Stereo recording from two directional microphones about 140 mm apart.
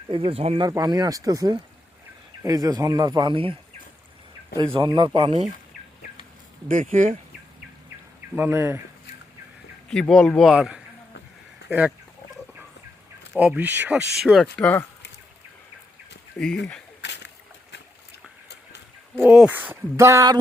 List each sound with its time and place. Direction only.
0.1 s speech: 40° right (ahead or behind)
0.6 s speech: 30° right (ahead or behind)
4.7 s speech: 35° right (ahead or behind)
6.7 s speech: 70° right (ahead or behind)
8.4 s speech: 20° right (ahead or behind)
9.9 s speech: 5° left (ahead or behind)
10.5 s speech: 5° right (ahead or behind)
13.3 s speech: 5° right (ahead or behind)
14.5 s speech: 10° left (ahead or behind)
16.4 s speech: 5° left (ahead or behind)
19.1 s speech: 15° right (ahead or behind)